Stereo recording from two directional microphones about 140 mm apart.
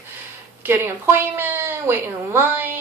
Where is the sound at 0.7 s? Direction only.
15° right (ahead or behind).